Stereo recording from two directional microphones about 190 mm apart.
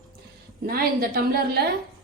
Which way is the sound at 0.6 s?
50° right (ahead or behind).